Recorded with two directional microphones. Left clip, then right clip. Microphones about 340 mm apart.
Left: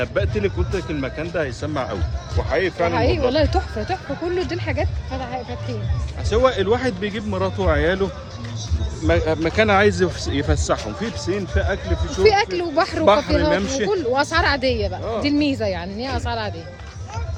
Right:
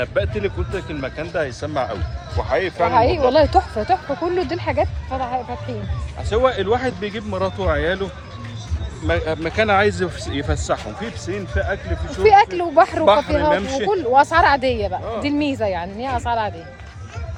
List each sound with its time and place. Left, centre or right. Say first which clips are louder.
0.0 s speech: right 1 dB; centre
6.3 s speech: even; centre
12.2 s speech: right 4 dB; centre